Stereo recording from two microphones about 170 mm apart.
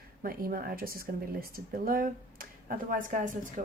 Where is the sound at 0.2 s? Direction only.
60° right (ahead or behind).